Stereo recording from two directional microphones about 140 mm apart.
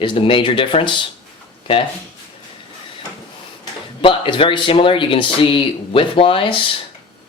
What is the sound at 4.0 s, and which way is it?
A man's voice, 35° left (ahead or behind).